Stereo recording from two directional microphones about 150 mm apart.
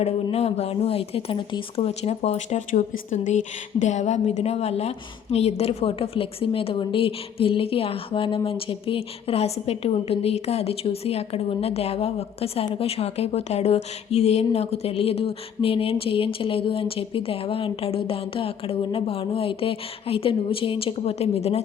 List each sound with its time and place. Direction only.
0.0 s a woman's voice: 45° left (ahead or behind)